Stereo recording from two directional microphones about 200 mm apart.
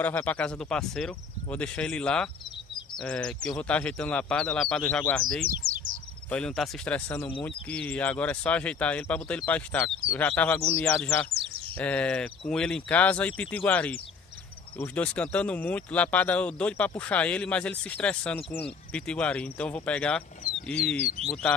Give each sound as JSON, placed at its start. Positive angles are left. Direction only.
{"t": 0.0, "sound": "speech", "side_deg": 10}
{"t": 5.6, "sound": "bird", "side_deg": -40}
{"t": 6.3, "sound": "speech", "side_deg": 5}
{"t": 21.0, "sound": "speech", "side_deg": -30}